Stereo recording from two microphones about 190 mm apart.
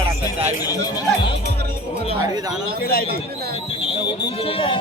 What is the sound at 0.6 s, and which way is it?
Speech, 20° left (ahead or behind).